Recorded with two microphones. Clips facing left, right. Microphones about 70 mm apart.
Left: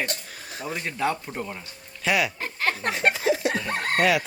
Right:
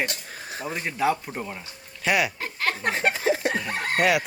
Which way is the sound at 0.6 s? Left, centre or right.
Centre.